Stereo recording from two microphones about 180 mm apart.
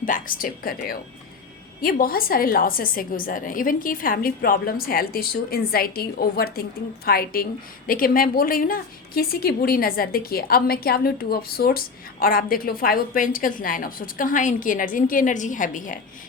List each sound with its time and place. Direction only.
0.0 s a woman's voice: 50° left (ahead or behind)